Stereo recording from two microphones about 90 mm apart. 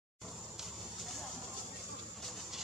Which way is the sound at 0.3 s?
5° right (ahead or behind).